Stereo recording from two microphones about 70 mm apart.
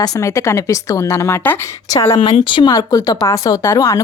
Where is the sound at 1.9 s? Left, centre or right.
Left.